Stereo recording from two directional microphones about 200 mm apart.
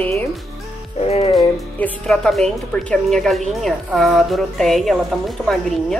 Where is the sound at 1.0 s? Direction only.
30° left (ahead or behind).